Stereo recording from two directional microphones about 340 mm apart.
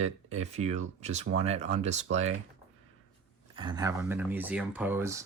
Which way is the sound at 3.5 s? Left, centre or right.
Centre.